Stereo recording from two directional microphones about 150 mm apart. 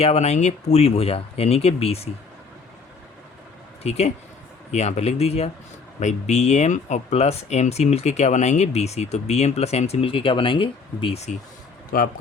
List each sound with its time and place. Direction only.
0.0 s speech: 45° left (ahead or behind)
3.8 s speech: 45° left (ahead or behind)
11.9 s speech: 90° left